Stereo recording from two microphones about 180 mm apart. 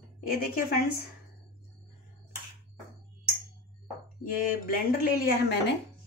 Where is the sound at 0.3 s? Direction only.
55° left (ahead or behind).